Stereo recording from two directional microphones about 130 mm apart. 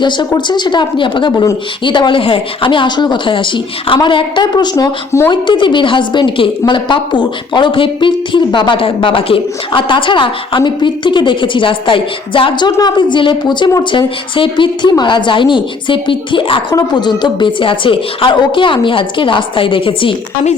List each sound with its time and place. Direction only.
0.0 s a woman's voice: 35° left (ahead or behind)